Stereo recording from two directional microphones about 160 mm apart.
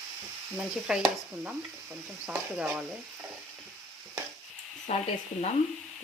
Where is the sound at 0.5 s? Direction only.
5° right (ahead or behind).